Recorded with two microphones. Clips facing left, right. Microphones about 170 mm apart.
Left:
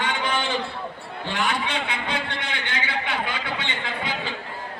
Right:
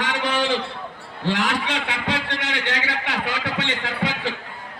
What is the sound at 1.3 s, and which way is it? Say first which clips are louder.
A man's voice: right 3 dB; 90° right.